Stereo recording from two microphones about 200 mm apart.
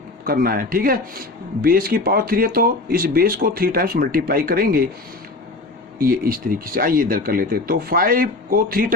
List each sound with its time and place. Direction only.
0.3 s speech: 45° right (ahead or behind)
6.0 s speech: 45° right (ahead or behind)